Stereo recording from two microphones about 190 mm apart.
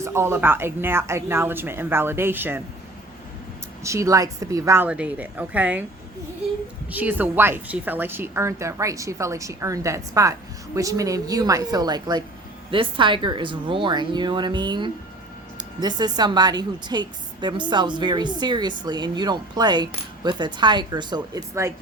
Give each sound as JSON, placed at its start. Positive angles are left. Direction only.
{"t": 0.0, "sound": "a woman's voice", "side_deg": -15}
{"t": 3.8, "sound": "a woman's voice", "side_deg": -15}
{"t": 6.9, "sound": "a woman's voice", "side_deg": -10}